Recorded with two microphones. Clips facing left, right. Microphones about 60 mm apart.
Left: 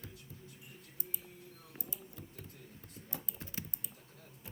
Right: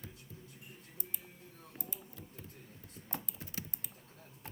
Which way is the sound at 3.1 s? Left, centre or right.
Right.